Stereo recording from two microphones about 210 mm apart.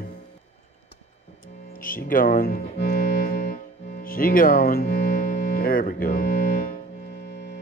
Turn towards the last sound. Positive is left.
turn(degrees=45)  # may be behind; listen again after turning